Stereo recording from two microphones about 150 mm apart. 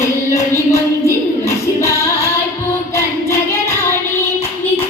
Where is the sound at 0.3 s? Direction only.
20° left (ahead or behind).